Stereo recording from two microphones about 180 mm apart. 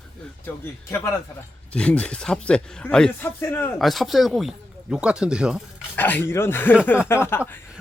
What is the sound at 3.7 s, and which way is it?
A man's voice, centre (ahead or behind).